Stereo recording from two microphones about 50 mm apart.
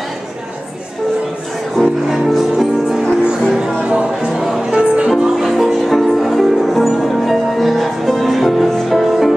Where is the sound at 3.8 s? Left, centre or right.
Centre.